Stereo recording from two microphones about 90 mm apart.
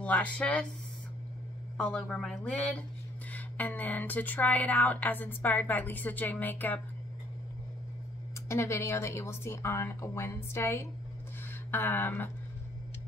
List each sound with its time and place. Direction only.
0.0 s speech: 15° left (ahead or behind)
1.8 s speech: 15° left (ahead or behind)
8.5 s speech: 30° left (ahead or behind)